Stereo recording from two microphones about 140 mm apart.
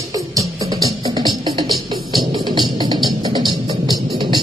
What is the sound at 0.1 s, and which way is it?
Music, 25° right (ahead or behind).